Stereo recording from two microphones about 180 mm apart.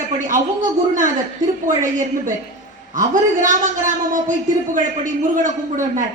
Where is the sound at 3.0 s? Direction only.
45° right (ahead or behind).